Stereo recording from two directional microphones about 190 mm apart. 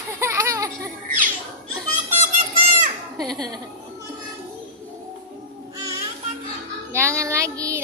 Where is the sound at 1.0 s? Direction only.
45° right (ahead or behind).